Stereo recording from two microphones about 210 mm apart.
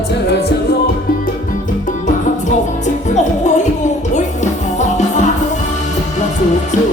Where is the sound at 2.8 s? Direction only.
35° left (ahead or behind).